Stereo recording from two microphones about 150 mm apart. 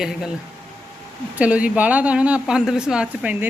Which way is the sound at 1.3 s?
10° right (ahead or behind).